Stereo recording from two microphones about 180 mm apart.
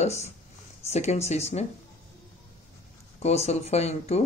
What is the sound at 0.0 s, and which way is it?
Speech, 40° left (ahead or behind).